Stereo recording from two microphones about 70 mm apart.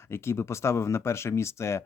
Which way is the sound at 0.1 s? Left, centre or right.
Left.